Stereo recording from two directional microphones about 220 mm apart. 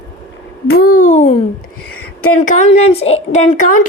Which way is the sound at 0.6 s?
45° left (ahead or behind).